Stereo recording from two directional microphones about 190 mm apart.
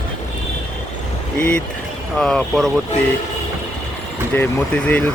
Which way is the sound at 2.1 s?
5° left (ahead or behind).